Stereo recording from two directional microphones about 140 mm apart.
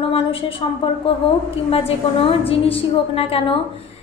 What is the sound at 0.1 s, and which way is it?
A woman's voice, 40° left (ahead or behind).